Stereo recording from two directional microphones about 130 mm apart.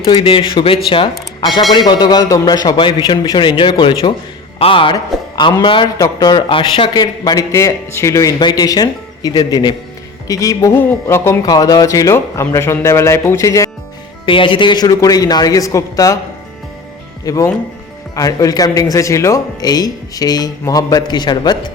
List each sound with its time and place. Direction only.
0.0 s a man's voice: 45° left (ahead or behind)
4.9 s a man's voice: 30° left (ahead or behind)
11.4 s speech: 30° left (ahead or behind)
14.3 s a man's voice: 40° left (ahead or behind); by 16.1 s 25° left (ahead or behind)
17.2 s speech: 25° left (ahead or behind)